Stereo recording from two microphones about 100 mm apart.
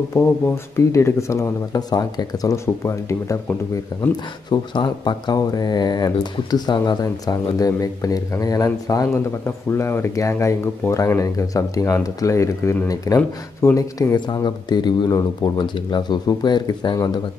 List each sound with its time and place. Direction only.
0.1 s speech: 25° left (ahead or behind)
3.9 s speech: 40° left (ahead or behind)
15.4 s speech: 50° left (ahead or behind)